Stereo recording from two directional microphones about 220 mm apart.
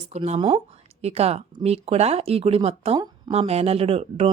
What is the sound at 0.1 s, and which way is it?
Speech, 25° right (ahead or behind).